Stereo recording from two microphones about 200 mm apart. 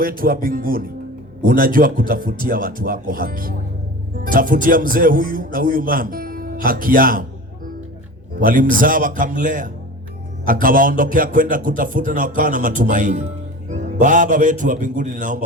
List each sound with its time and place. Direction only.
0.2 s speech: 45° right (ahead or behind)
8.4 s a man's voice: 45° right (ahead or behind)